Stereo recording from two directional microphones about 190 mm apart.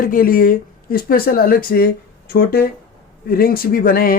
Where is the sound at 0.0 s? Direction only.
50° left (ahead or behind).